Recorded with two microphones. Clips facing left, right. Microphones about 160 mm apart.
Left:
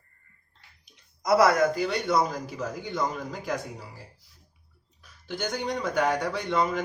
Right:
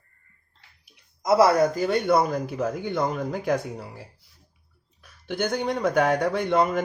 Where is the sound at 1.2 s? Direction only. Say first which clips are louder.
Right 2 dB; 25° right (ahead or behind); by 3.8 s 60° right (ahead or behind).